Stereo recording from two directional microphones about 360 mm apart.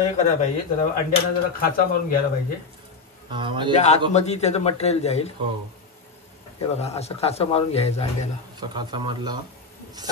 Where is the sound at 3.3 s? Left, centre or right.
Centre.